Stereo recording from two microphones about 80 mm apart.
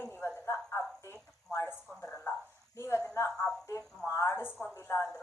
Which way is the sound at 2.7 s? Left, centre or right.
Left.